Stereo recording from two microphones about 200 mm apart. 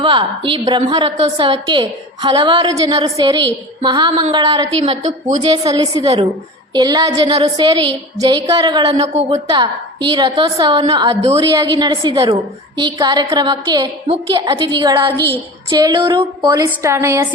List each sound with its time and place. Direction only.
0.0 s a woman's voice: 25° right (ahead or behind)
9.1 s a woman's voice: 35° right (ahead or behind)
9.6 s a woman's voice: 25° right (ahead or behind)
15.1 s a woman's voice: 10° left (ahead or behind)
15.7 s a woman's voice: 20° right (ahead or behind)